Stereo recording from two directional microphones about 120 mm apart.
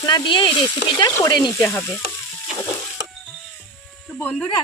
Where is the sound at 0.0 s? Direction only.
40° left (ahead or behind).